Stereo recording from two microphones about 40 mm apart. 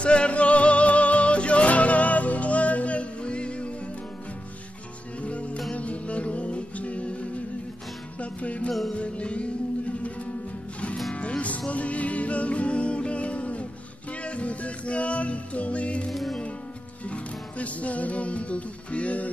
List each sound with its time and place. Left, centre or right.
0.0 s music: left
5.2 s music: left
11.1 s music: left
16.1 s music: centre
17.0 s music: left